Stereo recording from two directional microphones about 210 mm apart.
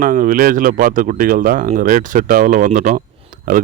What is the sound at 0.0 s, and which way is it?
Speech, 40° right (ahead or behind).